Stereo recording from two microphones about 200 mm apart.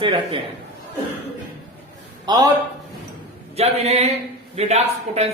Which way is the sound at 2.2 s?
20° right (ahead or behind).